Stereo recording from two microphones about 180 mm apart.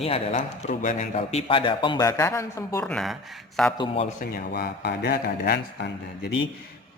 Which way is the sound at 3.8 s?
30° left (ahead or behind).